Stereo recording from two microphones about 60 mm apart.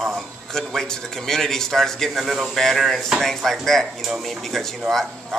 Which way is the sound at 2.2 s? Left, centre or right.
Centre.